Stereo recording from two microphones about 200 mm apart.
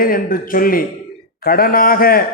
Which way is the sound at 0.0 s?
45° left (ahead or behind).